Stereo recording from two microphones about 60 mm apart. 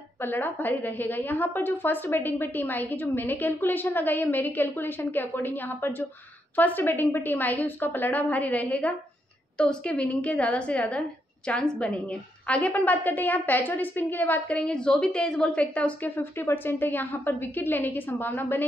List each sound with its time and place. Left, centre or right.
0.2 s a woman's voice: left
16.2 s a woman's voice: left